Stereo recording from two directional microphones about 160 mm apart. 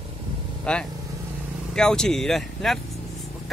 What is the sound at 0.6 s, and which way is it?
Speech, 5° left (ahead or behind).